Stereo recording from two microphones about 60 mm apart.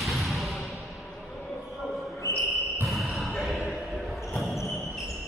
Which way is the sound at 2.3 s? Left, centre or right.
Left.